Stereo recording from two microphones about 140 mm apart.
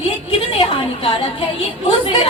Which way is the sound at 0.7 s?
35° left (ahead or behind).